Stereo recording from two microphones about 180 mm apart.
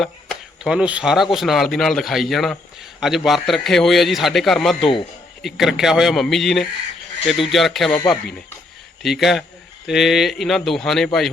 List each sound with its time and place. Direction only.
0.0 s speech: centre (ahead or behind)
4.8 s a man's voice: 30° left (ahead or behind)
5.4 s speech: centre (ahead or behind)